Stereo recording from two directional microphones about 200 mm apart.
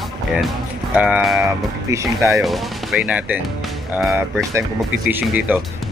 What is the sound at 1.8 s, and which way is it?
Speech, 15° right (ahead or behind).